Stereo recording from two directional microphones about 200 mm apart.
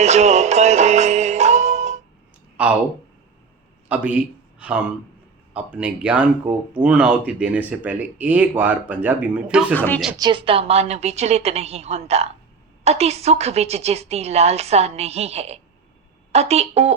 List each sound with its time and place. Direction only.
0.0 s music: 35° right (ahead or behind)
2.6 s speech: 5° right (ahead or behind)
3.8 s speech: 5° right (ahead or behind)
9.7 s speech: 10° left (ahead or behind)
10.2 s a woman's voice: 25° right (ahead or behind)